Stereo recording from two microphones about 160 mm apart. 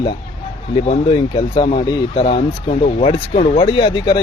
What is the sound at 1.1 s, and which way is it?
Speech, 35° left (ahead or behind).